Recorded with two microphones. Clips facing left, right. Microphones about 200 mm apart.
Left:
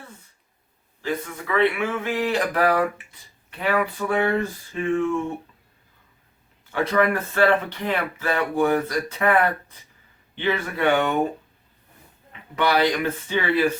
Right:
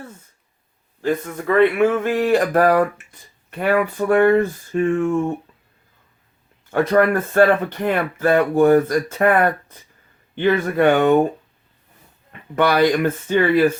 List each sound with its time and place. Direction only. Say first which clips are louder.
1.0 s speech: right 7 dB; 45° right (ahead or behind)
6.7 s speech: right 5 dB; 50° right (ahead or behind)
12.3 s speech: right 4 dB; 50° right (ahead or behind)